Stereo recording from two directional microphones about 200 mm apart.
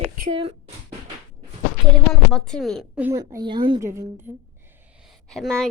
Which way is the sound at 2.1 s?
5° left (ahead or behind).